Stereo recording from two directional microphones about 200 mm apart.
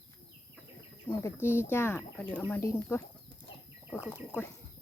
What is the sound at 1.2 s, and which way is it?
Speech, 15° left (ahead or behind).